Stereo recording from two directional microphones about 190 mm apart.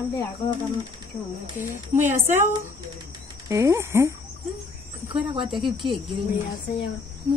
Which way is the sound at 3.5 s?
15° right (ahead or behind).